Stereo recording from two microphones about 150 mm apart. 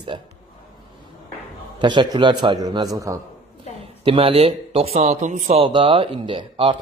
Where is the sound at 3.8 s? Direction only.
40° right (ahead or behind).